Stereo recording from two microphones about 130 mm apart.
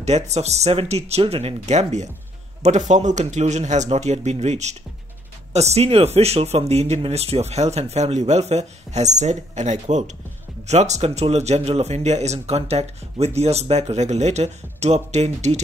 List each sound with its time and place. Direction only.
0.0 s speech: 60° right (ahead or behind)